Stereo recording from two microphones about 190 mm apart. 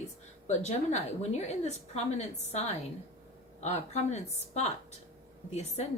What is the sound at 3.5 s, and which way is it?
Speech, 35° left (ahead or behind).